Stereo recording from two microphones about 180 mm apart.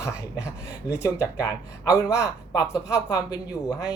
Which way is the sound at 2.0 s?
15° left (ahead or behind).